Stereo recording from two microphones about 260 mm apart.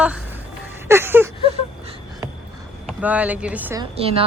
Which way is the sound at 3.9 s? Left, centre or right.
Right.